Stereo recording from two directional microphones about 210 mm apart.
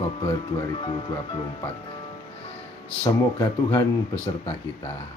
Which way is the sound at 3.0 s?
20° left (ahead or behind).